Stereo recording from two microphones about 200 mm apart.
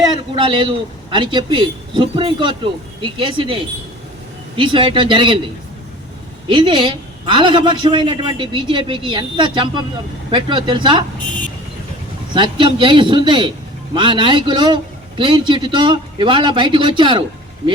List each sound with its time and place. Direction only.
0.3 s a man's voice: 25° right (ahead or behind)
6.5 s a man's voice: 25° right (ahead or behind)
12.3 s a man's voice: 25° right (ahead or behind)